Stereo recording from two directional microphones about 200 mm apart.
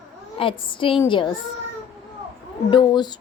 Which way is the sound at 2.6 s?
20° left (ahead or behind).